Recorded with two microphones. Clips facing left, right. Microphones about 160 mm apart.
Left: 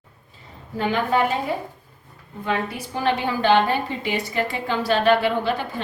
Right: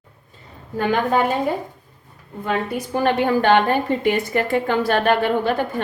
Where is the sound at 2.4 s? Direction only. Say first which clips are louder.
Right 3 dB; 45° right (ahead or behind).